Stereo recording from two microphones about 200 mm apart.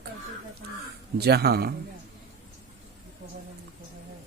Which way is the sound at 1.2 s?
50° right (ahead or behind).